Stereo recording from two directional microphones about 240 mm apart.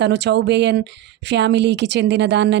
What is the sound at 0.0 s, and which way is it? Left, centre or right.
A woman's voice, right.